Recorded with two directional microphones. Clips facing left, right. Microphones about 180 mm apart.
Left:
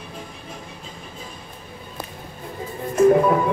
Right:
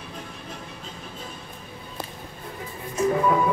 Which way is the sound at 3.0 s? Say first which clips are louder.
Left 8 dB; 50° left (ahead or behind).